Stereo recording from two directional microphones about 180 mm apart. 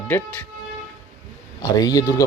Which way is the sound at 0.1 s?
15° left (ahead or behind).